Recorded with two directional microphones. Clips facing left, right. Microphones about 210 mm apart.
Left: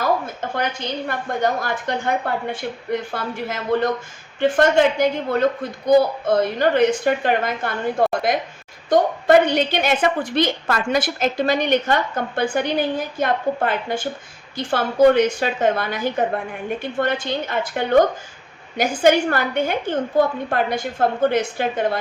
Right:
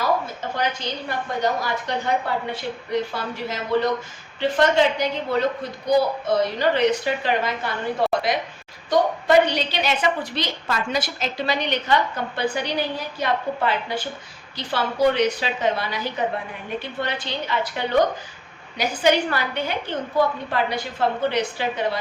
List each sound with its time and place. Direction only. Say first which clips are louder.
0.5 s a woman's voice: left 1 dB; 55° left (ahead or behind)